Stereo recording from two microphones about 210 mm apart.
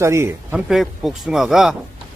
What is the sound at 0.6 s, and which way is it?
Speech, centre (ahead or behind).